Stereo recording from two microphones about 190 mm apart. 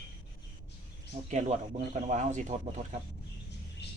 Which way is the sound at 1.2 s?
40° right (ahead or behind).